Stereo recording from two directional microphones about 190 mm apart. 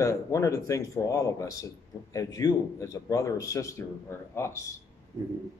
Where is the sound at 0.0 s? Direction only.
15° left (ahead or behind).